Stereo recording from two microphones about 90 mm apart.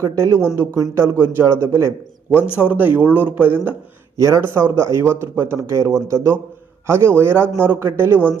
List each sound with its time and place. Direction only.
0.0 s a man's voice: 30° right (ahead or behind)
2.3 s speech: 15° right (ahead or behind)
4.2 s a man's voice: 35° right (ahead or behind)